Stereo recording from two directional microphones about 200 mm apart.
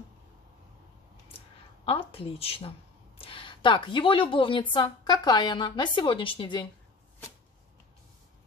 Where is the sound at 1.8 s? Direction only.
30° left (ahead or behind).